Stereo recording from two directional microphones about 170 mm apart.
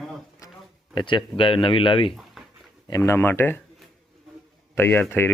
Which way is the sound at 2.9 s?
20° left (ahead or behind).